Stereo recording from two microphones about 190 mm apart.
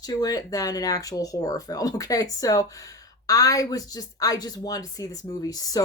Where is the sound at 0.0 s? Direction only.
20° left (ahead or behind).